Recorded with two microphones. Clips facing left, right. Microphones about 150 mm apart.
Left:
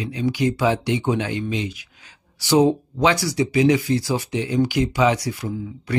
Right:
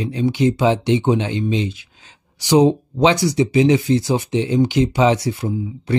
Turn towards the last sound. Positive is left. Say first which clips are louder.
# right 5 dB
turn(degrees=-25)  # may be behind; listen again after turning